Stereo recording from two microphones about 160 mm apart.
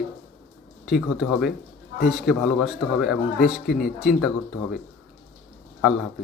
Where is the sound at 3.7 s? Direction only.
65° left (ahead or behind).